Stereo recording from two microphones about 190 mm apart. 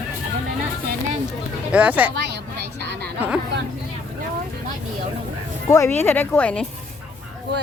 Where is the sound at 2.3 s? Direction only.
60° right (ahead or behind).